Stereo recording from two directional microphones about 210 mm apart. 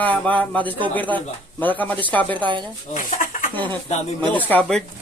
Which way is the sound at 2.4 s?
20° right (ahead or behind).